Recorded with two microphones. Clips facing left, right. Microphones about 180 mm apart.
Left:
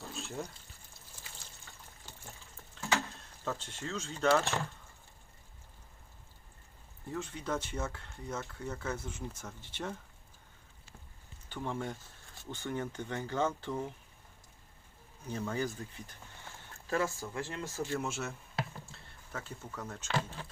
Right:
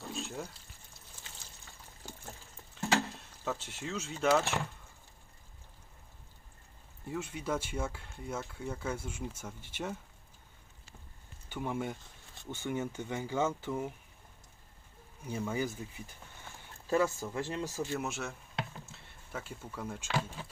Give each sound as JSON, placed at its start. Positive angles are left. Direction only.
{"t": 0.0, "sound": "water", "side_deg": 0}
{"t": 3.4, "sound": "speech", "side_deg": -5}
{"t": 7.1, "sound": "speech", "side_deg": -10}
{"t": 11.4, "sound": "speech", "side_deg": -10}
{"t": 12.5, "sound": "speech", "side_deg": -10}
{"t": 15.2, "sound": "speech", "side_deg": -10}
{"t": 16.9, "sound": "speech", "side_deg": -20}
{"t": 17.7, "sound": "a sound", "side_deg": -5}
{"t": 19.3, "sound": "speech", "side_deg": -10}